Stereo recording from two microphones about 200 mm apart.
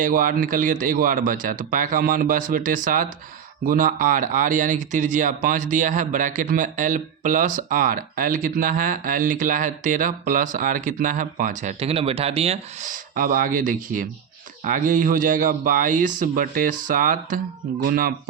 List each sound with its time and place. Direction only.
0.0 s speech: 45° right (ahead or behind)